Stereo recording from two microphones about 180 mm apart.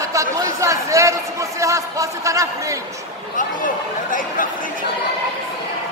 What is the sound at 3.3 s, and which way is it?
Chatter, 50° left (ahead or behind).